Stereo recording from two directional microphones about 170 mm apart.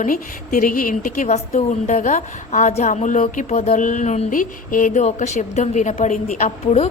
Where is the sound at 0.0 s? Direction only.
50° left (ahead or behind).